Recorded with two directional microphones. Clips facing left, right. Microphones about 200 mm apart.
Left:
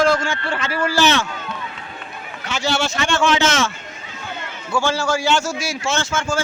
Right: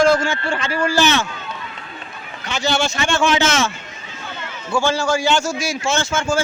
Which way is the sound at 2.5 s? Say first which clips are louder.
Right 1 dB; 5° left (ahead or behind).